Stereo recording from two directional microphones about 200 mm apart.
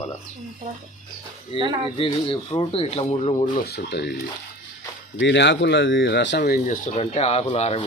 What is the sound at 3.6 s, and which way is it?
Speech, 55° left (ahead or behind).